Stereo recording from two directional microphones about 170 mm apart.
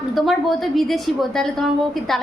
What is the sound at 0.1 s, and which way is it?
A woman's voice, centre (ahead or behind).